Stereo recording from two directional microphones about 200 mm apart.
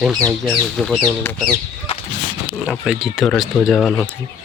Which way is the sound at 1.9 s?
30° left (ahead or behind).